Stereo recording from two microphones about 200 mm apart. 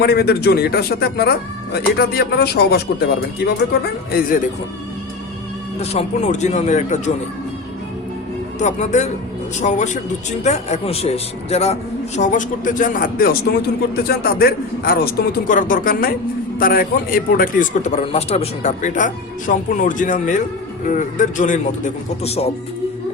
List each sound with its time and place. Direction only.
0.0 s speech: 50° left (ahead or behind)
5.8 s a man's voice: 30° left (ahead or behind)
8.5 s a man's voice: 35° left (ahead or behind)